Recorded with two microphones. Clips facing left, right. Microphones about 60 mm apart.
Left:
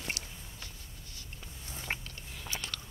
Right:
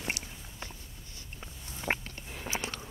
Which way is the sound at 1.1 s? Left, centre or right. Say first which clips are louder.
Right 3 dB; right.